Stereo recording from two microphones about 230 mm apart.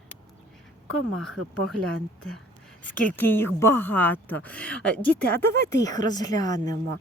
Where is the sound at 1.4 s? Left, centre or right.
Right.